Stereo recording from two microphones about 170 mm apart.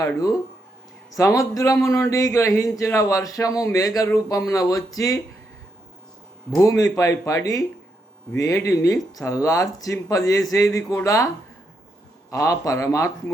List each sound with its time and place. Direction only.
1.1 s speech: 20° left (ahead or behind)
6.5 s speech: 20° left (ahead or behind)
12.3 s speech: 20° left (ahead or behind)